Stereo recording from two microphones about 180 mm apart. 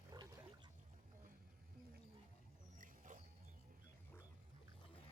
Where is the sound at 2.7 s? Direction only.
45° right (ahead or behind).